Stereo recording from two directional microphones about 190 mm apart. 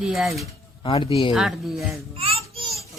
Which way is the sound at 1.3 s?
5° right (ahead or behind).